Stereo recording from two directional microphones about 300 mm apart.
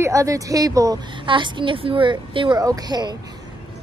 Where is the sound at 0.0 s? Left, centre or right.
Centre.